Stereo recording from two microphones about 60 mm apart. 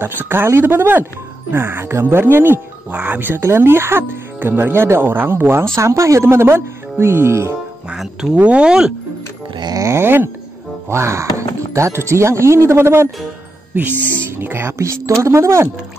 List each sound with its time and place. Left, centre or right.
0.0 s speech: right
5.8 s speech: right
7.9 s speech: centre
9.7 s a sound: right
9.9 s speech: right
10.9 s speech: right
14.3 s speech: right
14.8 s speech: right